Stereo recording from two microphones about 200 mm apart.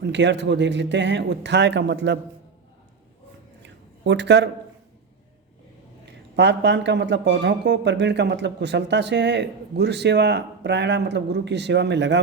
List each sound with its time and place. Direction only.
0.0 s speech: 60° right (ahead or behind)
3.6 s a sound: 60° right (ahead or behind)
6.1 s speech: 60° right (ahead or behind)